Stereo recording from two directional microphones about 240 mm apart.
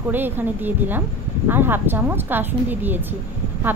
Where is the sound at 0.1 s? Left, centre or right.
Centre.